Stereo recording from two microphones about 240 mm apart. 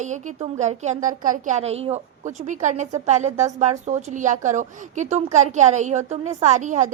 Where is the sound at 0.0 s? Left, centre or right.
Right.